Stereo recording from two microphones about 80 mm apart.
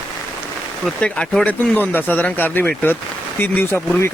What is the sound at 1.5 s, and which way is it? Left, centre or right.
Speech, left.